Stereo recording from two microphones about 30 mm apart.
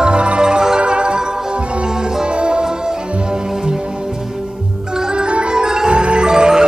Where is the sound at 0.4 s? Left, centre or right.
Right.